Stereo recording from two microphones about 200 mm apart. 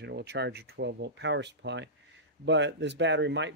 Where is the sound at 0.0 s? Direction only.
55° right (ahead or behind).